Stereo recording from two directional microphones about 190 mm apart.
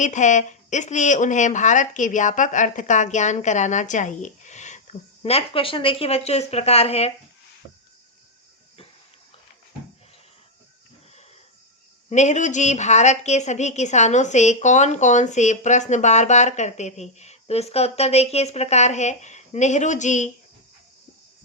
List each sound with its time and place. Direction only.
0.0 s a woman's voice: 40° left (ahead or behind)
12.0 s a woman's voice: 40° left (ahead or behind)